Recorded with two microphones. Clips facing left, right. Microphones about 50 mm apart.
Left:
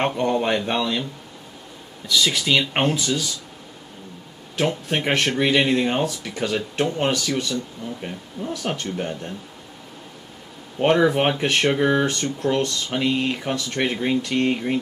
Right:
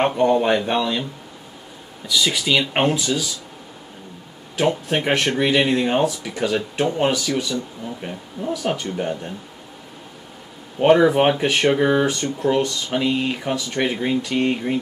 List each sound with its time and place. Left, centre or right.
0.0 s speech: centre
2.0 s speech: centre
4.6 s speech: centre
10.8 s speech: centre